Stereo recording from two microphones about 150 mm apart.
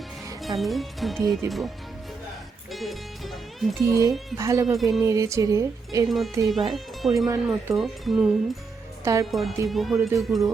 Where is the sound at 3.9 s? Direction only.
20° right (ahead or behind).